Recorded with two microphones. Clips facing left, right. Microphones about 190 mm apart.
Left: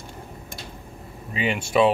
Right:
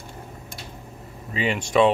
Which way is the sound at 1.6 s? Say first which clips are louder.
Right 1 dB; 10° left (ahead or behind).